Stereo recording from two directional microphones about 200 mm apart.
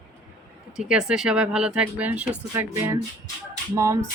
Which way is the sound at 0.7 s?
5° right (ahead or behind).